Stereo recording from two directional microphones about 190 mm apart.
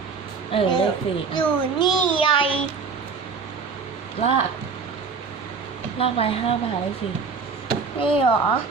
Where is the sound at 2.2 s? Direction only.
25° left (ahead or behind).